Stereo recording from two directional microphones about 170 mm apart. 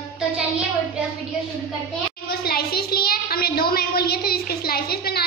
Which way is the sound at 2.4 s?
65° left (ahead or behind).